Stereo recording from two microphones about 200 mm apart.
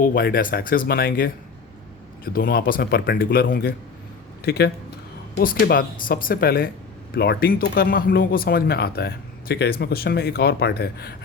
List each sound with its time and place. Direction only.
0.0 s speech: 45° left (ahead or behind)